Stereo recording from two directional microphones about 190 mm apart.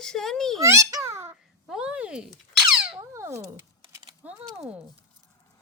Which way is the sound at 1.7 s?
5° right (ahead or behind).